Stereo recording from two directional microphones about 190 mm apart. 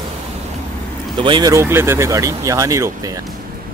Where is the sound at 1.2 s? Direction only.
20° right (ahead or behind).